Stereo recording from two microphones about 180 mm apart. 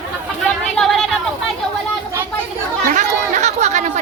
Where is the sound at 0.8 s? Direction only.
Centre (ahead or behind).